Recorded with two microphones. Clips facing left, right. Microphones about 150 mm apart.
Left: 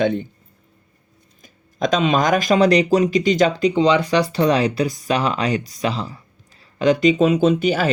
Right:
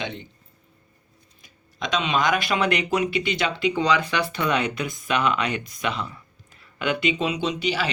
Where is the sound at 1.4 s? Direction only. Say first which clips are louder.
Left 10 dB; 45° left (ahead or behind).